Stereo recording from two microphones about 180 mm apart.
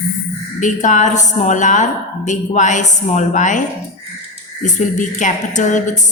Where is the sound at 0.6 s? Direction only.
45° left (ahead or behind).